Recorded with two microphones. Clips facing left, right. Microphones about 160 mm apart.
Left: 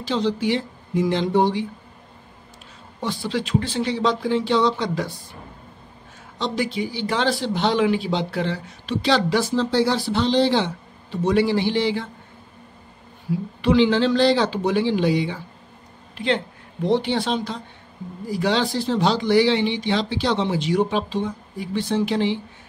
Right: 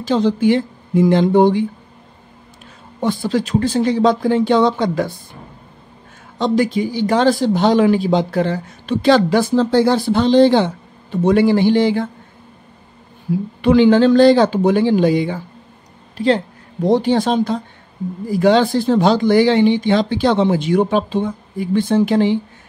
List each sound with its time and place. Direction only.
0.0 s speech: 50° right (ahead or behind)
3.0 s speech: 50° right (ahead or behind)
6.3 s speech: 50° right (ahead or behind)
13.6 s a woman's voice: 50° right (ahead or behind)